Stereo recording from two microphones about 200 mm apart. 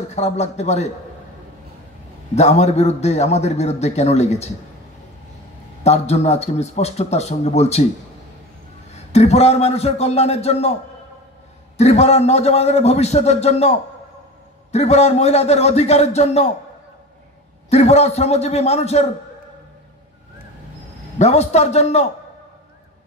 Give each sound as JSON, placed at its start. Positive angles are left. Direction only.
{"t": 0.1, "sound": "a man's voice", "side_deg": 35}
{"t": 2.3, "sound": "a man's voice", "side_deg": 35}
{"t": 5.9, "sound": "a man's voice", "side_deg": 35}
{"t": 8.9, "sound": "a man's voice", "side_deg": 30}
{"t": 17.6, "sound": "a man's voice", "side_deg": 30}
{"t": 21.2, "sound": "a man's voice", "side_deg": 30}